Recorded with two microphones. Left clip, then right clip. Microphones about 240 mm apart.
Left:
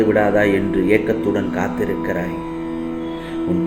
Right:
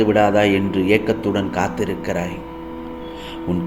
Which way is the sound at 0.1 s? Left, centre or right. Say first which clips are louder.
Even; right.